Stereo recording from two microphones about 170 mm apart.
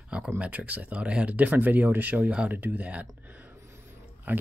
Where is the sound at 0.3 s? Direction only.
10° right (ahead or behind).